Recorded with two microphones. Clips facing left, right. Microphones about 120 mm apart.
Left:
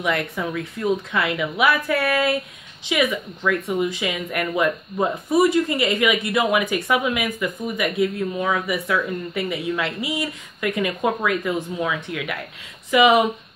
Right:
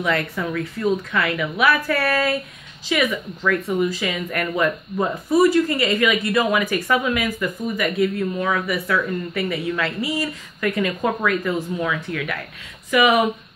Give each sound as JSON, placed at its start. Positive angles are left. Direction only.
{"t": 0.0, "sound": "speech", "side_deg": 15}